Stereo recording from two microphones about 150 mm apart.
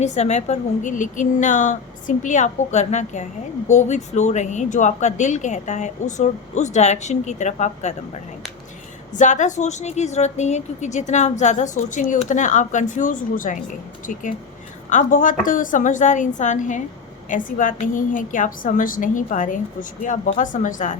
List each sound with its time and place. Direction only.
0.0 s a woman's voice: 50° left (ahead or behind)
9.1 s a woman's voice: 55° left (ahead or behind)
14.8 s speech: 60° left (ahead or behind)